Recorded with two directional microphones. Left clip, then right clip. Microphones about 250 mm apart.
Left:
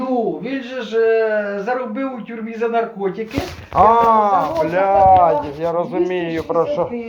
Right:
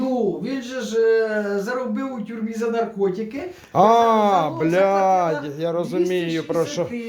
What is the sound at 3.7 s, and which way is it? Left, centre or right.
Speech, right.